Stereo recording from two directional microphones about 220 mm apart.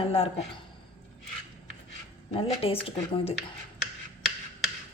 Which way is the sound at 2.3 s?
25° left (ahead or behind).